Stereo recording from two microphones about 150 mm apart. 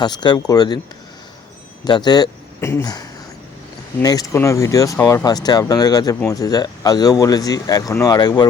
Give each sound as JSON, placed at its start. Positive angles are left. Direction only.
{"t": 0.0, "sound": "speech", "side_deg": 30}
{"t": 1.8, "sound": "speech", "side_deg": 30}